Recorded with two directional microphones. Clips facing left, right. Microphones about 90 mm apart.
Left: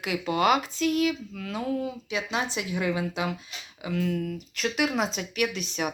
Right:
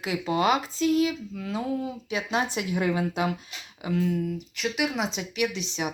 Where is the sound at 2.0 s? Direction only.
45° right (ahead or behind).